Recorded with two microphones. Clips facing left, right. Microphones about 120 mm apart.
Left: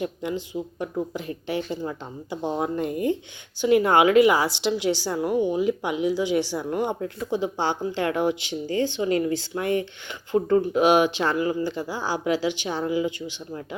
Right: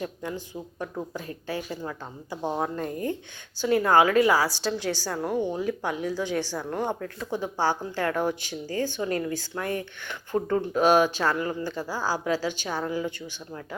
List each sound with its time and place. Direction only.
0.0 s a woman's voice: 15° left (ahead or behind)
10.3 s speech: centre (ahead or behind)
10.7 s a woman's voice: 15° left (ahead or behind)